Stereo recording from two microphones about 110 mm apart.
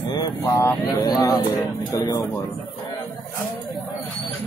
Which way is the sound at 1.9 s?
35° left (ahead or behind).